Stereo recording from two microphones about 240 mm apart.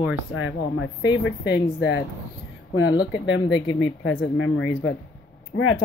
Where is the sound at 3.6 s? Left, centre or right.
Left.